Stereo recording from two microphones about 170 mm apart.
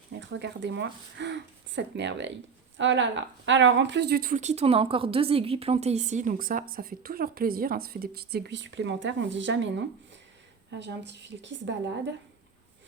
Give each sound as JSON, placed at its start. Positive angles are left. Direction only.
{"t": 0.1, "sound": "speech", "side_deg": -90}